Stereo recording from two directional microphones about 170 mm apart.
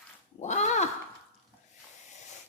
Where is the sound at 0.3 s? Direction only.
45° left (ahead or behind).